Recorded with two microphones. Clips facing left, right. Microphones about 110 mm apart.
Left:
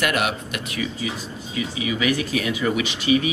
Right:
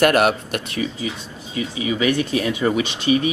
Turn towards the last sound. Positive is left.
turn(degrees=-30)  # may be behind; listen again after turning